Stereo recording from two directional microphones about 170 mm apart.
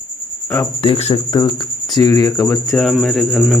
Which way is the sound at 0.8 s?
35° left (ahead or behind).